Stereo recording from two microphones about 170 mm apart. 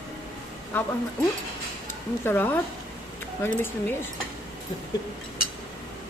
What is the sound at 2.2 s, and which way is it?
Speech, 10° left (ahead or behind).